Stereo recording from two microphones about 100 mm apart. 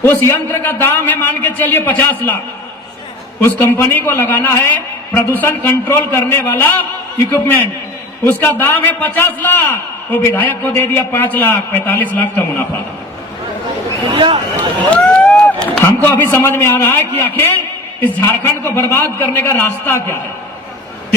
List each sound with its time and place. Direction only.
0.0 s a man's voice: 25° left (ahead or behind)
3.4 s a man's voice: 25° left (ahead or behind)
8.2 s a man's voice: 20° left (ahead or behind)
14.1 s speech: 55° right (ahead or behind)
14.5 s a sound: 15° left (ahead or behind)
15.8 s a man's voice: 20° left (ahead or behind)